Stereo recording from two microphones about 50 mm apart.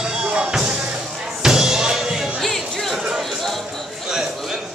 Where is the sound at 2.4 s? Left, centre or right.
Centre.